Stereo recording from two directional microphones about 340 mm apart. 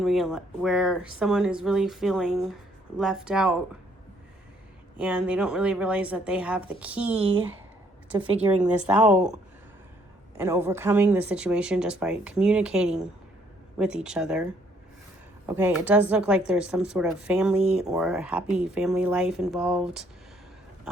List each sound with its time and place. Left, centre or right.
0.0 s speech: centre
4.9 s speech: centre
8.2 s a woman's voice: centre
8.9 s speech: centre
10.3 s speech: centre
15.4 s speech: centre